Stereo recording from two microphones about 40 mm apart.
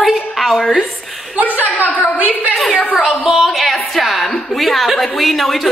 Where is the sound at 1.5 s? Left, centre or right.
Left.